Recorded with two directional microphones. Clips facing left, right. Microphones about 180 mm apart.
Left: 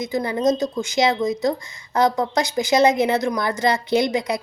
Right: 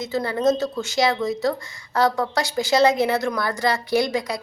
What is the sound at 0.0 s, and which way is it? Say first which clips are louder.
Speech: left 1 dB; 15° left (ahead or behind).